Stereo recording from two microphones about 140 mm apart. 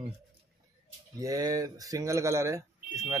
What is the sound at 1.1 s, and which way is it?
Speech, 25° right (ahead or behind).